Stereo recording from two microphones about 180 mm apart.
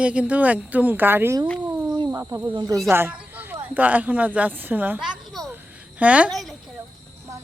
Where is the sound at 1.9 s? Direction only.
20° right (ahead or behind).